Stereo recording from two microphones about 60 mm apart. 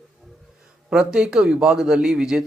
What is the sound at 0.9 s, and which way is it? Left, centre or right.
A man's voice, centre.